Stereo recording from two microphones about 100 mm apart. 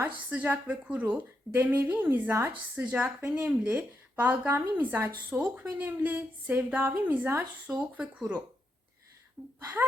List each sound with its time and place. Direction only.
0.0 s a woman's voice: 15° right (ahead or behind)
9.4 s speech: centre (ahead or behind)